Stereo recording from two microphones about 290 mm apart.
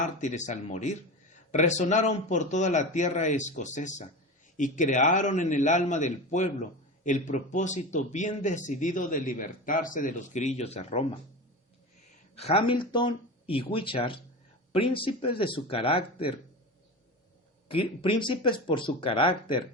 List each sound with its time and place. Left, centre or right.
0.0 s a man's voice: left
12.4 s a man's voice: centre
17.7 s speech: centre